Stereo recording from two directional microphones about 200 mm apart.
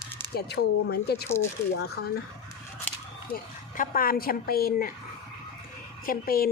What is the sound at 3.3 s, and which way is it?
Speech, 45° left (ahead or behind).